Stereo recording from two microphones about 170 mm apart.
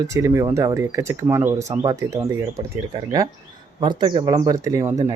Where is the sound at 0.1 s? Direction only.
20° right (ahead or behind).